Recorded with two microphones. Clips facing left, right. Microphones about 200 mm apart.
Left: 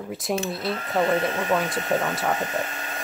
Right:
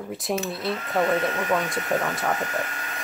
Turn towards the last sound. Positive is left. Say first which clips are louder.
# left 1 dB
turn(degrees=25)  # may be behind; listen again after turning